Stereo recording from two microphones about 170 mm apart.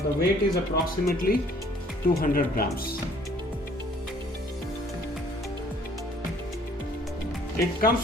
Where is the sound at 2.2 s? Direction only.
60° left (ahead or behind).